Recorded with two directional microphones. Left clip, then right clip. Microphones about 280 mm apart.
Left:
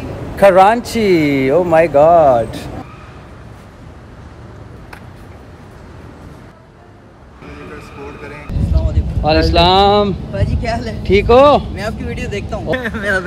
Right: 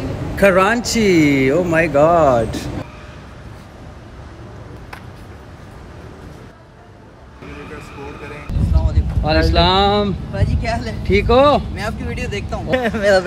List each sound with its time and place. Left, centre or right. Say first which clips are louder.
0.4 s speech: left 5 dB; centre
8.7 s speech: left 2 dB; centre
12.9 s speech: right 6 dB; right